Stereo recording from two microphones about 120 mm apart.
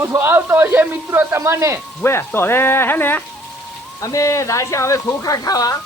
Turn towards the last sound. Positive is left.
turn(degrees=30)  # may be behind; listen again after turning